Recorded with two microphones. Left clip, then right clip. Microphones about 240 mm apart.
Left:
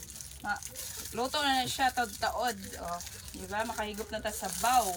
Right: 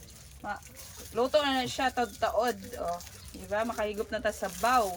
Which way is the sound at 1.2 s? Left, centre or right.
Centre.